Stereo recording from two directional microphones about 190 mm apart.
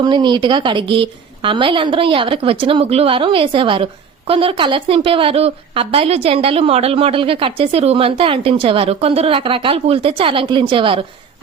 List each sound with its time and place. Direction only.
0.0 s a woman's voice: 25° right (ahead or behind)